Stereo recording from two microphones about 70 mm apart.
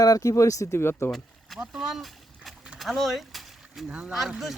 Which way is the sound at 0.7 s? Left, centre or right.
Left.